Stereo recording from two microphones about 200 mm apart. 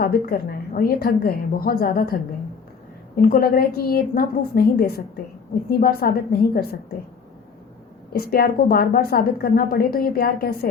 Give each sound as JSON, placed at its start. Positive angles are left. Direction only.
{"t": 0.0, "sound": "a woman's voice", "side_deg": 50}
{"t": 3.2, "sound": "a woman's voice", "side_deg": 45}
{"t": 8.1, "sound": "a woman's voice", "side_deg": 50}